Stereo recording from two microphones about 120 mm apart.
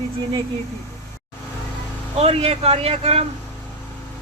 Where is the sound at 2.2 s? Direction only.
60° right (ahead or behind).